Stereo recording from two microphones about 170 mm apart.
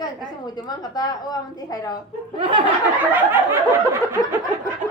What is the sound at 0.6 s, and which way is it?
A woman's voice, 25° left (ahead or behind).